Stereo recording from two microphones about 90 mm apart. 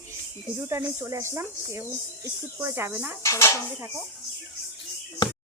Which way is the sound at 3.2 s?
35° left (ahead or behind).